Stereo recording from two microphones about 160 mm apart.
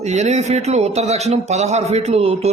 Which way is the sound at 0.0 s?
45° right (ahead or behind).